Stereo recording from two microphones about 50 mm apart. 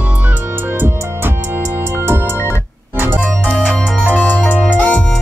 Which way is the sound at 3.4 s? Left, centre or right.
Left.